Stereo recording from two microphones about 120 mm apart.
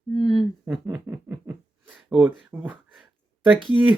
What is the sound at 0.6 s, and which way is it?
Speech, 10° right (ahead or behind).